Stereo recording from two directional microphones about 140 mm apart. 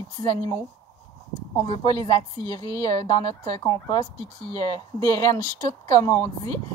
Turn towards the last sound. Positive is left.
turn(degrees=20)  # may be behind; listen again after turning